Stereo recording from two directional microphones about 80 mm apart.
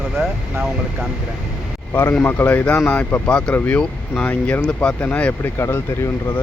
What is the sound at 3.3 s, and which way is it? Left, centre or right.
Speech, centre.